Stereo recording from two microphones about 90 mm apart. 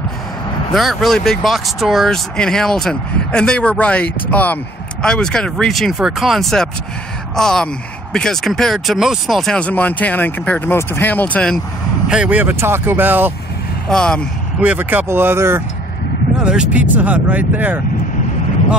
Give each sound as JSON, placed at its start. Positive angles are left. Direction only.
{"t": 0.7, "sound": "speech", "side_deg": 0}
{"t": 9.6, "sound": "speech", "side_deg": 15}
{"t": 12.1, "sound": "speech", "side_deg": -15}
{"t": 13.8, "sound": "speech", "side_deg": 10}
{"t": 14.6, "sound": "speech", "side_deg": -20}
{"t": 16.3, "sound": "speech", "side_deg": -10}